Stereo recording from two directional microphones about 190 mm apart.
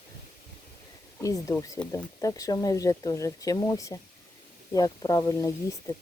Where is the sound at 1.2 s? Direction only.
15° left (ahead or behind).